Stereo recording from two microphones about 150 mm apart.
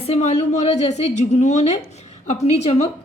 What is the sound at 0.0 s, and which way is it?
A woman's voice, 45° left (ahead or behind).